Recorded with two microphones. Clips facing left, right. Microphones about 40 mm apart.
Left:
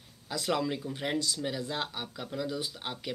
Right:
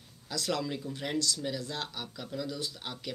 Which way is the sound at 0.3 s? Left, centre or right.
Left.